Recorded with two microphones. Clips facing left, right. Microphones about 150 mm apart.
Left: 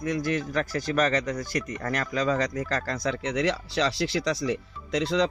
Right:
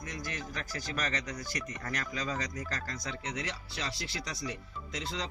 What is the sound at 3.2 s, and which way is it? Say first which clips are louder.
Speech: left 14 dB; 80° left.